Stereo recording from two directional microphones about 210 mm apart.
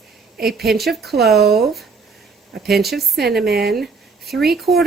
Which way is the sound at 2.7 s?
Centre (ahead or behind).